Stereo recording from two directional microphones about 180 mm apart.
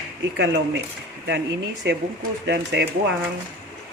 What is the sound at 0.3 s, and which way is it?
Speech, 75° right (ahead or behind).